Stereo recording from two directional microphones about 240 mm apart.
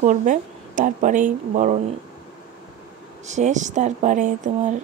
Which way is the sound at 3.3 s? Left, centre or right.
Right.